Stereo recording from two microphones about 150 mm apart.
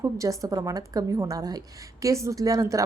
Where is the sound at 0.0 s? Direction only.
20° right (ahead or behind).